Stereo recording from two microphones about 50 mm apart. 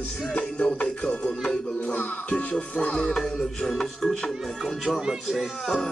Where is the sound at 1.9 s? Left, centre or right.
Left.